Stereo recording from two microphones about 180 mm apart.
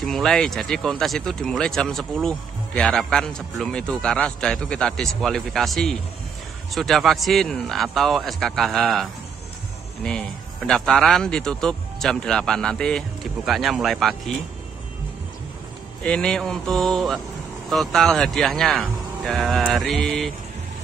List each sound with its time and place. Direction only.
0.0 s speech: centre (ahead or behind)
10.7 s speech: centre (ahead or behind)
16.0 s speech: 5° left (ahead or behind)